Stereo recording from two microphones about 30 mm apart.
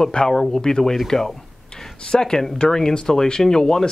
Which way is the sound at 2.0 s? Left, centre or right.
Left.